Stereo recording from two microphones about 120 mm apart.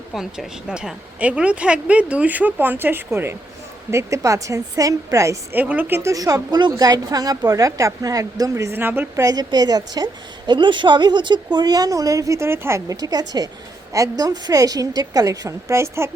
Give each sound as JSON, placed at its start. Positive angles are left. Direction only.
{"t": 0.1, "sound": "a woman's voice", "side_deg": -5}
{"t": 9.2, "sound": "a woman's voice", "side_deg": -35}